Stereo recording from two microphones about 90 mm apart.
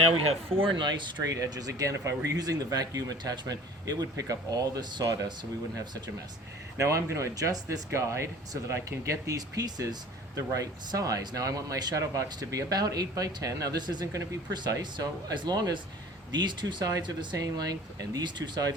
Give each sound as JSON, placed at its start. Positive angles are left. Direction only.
{"t": 0.5, "sound": "speech", "side_deg": -70}
{"t": 1.2, "sound": "speech", "side_deg": -40}
{"t": 6.7, "sound": "speech", "side_deg": -35}
{"t": 17.3, "sound": "speech", "side_deg": -45}